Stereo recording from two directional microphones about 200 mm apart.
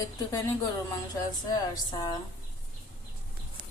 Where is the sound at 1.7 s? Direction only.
20° left (ahead or behind).